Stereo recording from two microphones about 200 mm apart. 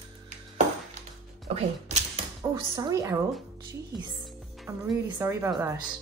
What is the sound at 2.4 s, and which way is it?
Speech, 20° right (ahead or behind).